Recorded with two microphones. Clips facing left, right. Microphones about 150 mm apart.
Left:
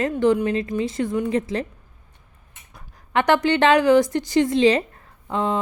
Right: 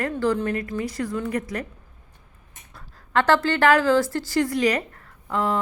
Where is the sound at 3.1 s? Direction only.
15° left (ahead or behind).